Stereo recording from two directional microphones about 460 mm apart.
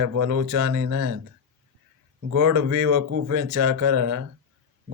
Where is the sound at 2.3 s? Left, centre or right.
Right.